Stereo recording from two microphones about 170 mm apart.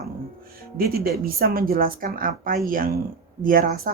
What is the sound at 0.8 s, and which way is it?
Speech, 60° right (ahead or behind).